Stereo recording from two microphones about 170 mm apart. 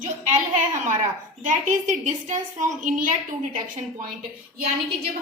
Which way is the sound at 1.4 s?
45° right (ahead or behind).